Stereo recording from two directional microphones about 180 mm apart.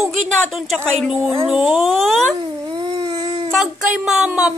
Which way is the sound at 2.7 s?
25° right (ahead or behind).